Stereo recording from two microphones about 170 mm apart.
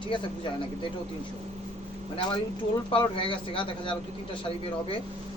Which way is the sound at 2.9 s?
30° left (ahead or behind).